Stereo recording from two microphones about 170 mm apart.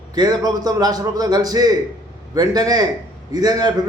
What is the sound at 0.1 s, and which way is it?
A man's voice, 25° right (ahead or behind).